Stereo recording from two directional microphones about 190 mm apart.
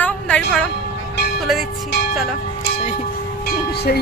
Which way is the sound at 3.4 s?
55° left (ahead or behind).